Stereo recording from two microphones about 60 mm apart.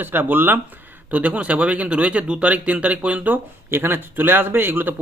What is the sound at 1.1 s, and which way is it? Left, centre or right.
Speech, right.